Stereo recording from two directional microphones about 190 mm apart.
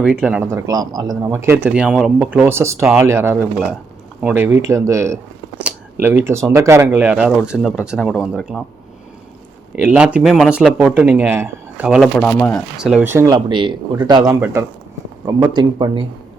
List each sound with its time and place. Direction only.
0.0 s speech: 5° right (ahead or behind)
0.5 s speech: 20° right (ahead or behind); by 8.6 s 5° right (ahead or behind)
9.7 s speech: 5° right (ahead or behind); by 14.3 s 20° right (ahead or behind)
15.5 s speech: 25° right (ahead or behind)